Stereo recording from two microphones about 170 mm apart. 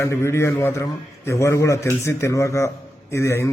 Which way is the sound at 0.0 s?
15° left (ahead or behind).